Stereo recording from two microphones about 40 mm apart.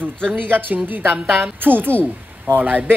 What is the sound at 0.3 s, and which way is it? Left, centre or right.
Speech, right.